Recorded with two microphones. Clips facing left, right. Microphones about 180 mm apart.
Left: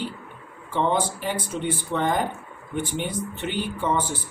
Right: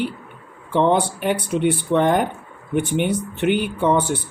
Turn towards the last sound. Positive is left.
turn(degrees=-70)  # may be behind; listen again after turning